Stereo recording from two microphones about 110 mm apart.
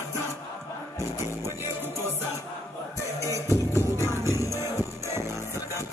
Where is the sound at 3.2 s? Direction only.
25° right (ahead or behind).